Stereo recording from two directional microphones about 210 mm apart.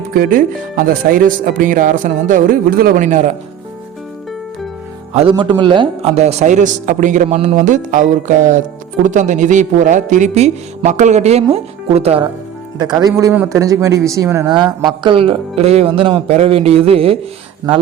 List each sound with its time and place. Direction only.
0.1 s a man's voice: 45° right (ahead or behind)
5.1 s a man's voice: 25° right (ahead or behind)
12.8 s a man's voice: 20° right (ahead or behind)